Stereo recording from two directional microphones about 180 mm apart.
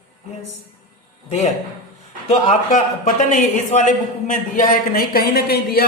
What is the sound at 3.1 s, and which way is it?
A man's voice, 45° left (ahead or behind).